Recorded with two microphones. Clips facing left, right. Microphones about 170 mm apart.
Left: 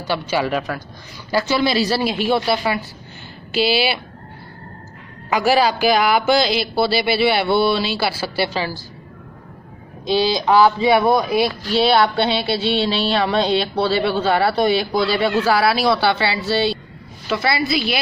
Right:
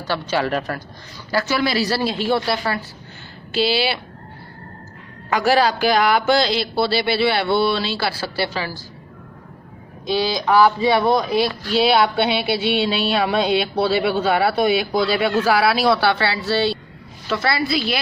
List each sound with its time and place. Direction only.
0.0 s speech: 10° left (ahead or behind)
1.3 s speech: 20° left (ahead or behind)
5.3 s speech: 5° left (ahead or behind)
8.5 s speech: 30° left (ahead or behind)
10.0 s speech: 30° left (ahead or behind)
11.0 s speech: 5° left (ahead or behind)
11.8 s speech: 5° right (ahead or behind)
17.3 s speech: 10° left (ahead or behind)